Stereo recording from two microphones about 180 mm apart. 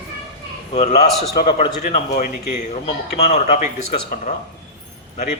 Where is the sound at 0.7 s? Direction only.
35° left (ahead or behind).